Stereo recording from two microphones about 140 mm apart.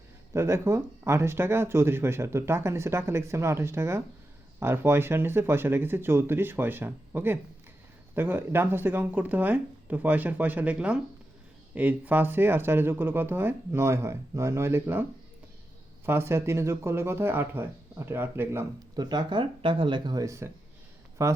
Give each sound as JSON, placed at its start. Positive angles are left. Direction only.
{"t": 0.3, "sound": "speech", "side_deg": -20}
{"t": 16.0, "sound": "speech", "side_deg": -15}
{"t": 18.9, "sound": "speech", "side_deg": -30}